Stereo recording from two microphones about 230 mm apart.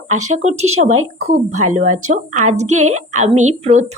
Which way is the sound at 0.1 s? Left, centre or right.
Right.